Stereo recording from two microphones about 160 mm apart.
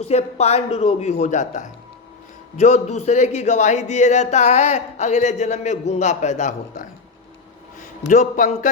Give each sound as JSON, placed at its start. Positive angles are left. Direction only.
{"t": 0.1, "sound": "a man's voice", "side_deg": 40}
{"t": 8.0, "sound": "a man's voice", "side_deg": 50}